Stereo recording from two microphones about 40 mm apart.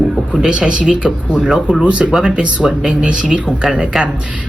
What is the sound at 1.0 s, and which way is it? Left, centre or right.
Speech, centre.